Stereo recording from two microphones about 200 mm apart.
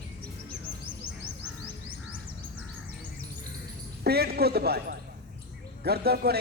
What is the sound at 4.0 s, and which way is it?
A man's voice, 50° right (ahead or behind).